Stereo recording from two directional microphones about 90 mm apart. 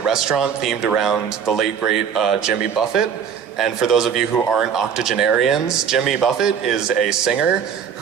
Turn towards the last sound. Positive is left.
turn(degrees=-5)  # may be behind; listen again after turning